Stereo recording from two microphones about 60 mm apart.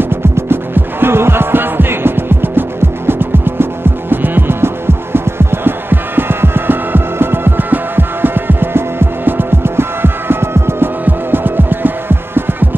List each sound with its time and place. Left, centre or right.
0.1 s music: right